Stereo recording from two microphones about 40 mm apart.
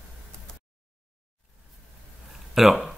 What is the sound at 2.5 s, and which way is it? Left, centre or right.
Speech, centre.